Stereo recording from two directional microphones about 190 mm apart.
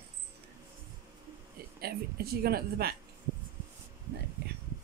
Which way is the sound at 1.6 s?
55° right (ahead or behind).